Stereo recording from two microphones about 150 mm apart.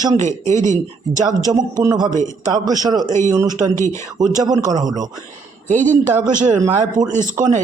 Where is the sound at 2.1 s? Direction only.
55° right (ahead or behind).